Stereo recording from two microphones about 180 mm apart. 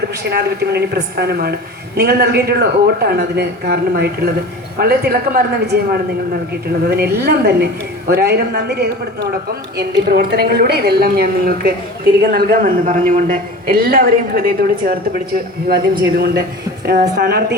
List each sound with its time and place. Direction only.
0.3 s a woman's voice: 65° right (ahead or behind)